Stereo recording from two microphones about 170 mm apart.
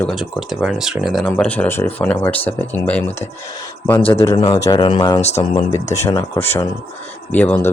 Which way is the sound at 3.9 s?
35° left (ahead or behind).